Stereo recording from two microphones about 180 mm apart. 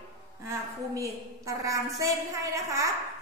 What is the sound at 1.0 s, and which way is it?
A woman's voice, 20° right (ahead or behind).